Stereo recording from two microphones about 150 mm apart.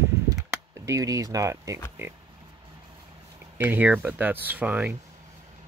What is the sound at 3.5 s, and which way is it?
Speech, 15° right (ahead or behind).